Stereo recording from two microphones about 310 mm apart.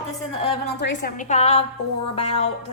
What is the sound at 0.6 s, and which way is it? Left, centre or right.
Speech, left.